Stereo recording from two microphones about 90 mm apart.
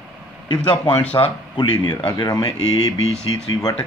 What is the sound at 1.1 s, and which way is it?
Speech, 60° left (ahead or behind).